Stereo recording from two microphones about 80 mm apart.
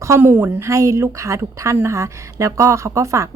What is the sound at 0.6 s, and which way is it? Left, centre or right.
A woman's voice, right.